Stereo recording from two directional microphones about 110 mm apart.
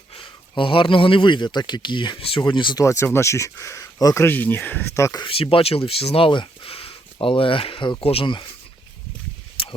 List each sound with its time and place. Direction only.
0.1 s speech: 50° left (ahead or behind)
2.8 s speech: 25° left (ahead or behind)
5.2 s speech: 55° left (ahead or behind)
9.6 s a sound: 55° left (ahead or behind)